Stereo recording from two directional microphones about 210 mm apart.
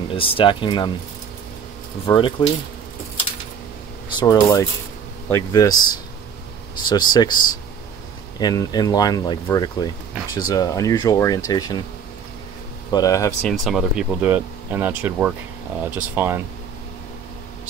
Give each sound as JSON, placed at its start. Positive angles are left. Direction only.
{"t": 0.1, "sound": "speech", "side_deg": 25}
{"t": 2.0, "sound": "speech", "side_deg": 25}
{"t": 4.2, "sound": "speech", "side_deg": 20}
{"t": 12.9, "sound": "speech", "side_deg": 15}
{"t": 13.4, "sound": "speech", "side_deg": 0}